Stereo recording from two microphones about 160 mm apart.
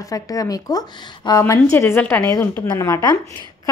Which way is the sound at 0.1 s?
20° left (ahead or behind).